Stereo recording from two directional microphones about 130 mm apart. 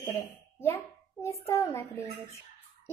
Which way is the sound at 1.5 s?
20° left (ahead or behind).